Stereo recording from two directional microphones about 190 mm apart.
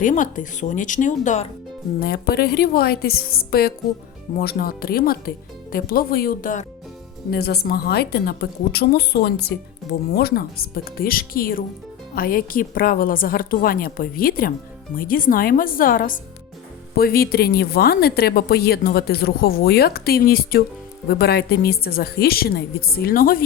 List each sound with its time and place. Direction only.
0.0 s speech: 45° left (ahead or behind)
2.0 s a woman's voice: 55° left (ahead or behind)
7.3 s a woman's voice: 55° left (ahead or behind)